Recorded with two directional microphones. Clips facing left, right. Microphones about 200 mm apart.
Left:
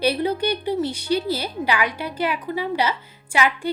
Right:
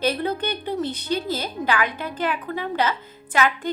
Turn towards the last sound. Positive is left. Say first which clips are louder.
# even
turn(degrees=10)  # may be behind; listen again after turning